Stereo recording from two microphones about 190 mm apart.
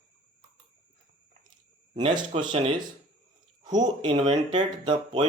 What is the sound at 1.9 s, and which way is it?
Speech, 25° right (ahead or behind).